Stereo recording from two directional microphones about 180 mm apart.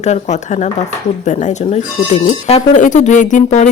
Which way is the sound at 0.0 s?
40° left (ahead or behind).